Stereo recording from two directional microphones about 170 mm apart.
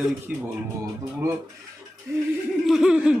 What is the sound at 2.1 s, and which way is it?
Speech, 15° right (ahead or behind).